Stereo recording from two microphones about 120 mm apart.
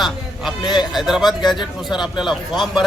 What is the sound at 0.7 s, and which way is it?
A man's voice, centre (ahead or behind).